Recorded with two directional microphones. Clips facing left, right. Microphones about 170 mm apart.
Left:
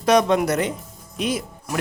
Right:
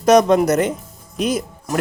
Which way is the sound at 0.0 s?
45° right (ahead or behind).